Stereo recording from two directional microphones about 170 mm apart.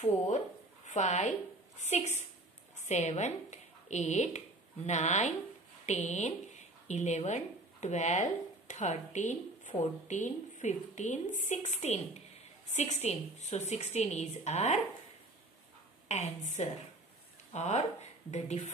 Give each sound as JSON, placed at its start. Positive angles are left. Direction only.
{"t": 0.8, "sound": "a woman's voice", "side_deg": 45}
{"t": 16.1, "sound": "a woman's voice", "side_deg": 40}